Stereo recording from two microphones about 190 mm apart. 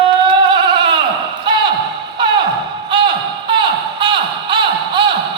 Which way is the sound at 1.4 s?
25° right (ahead or behind).